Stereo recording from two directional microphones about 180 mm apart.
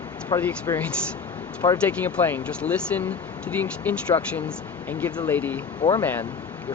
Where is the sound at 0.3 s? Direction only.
10° left (ahead or behind).